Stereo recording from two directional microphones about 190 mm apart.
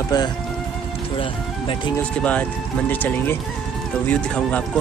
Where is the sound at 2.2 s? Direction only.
10° left (ahead or behind).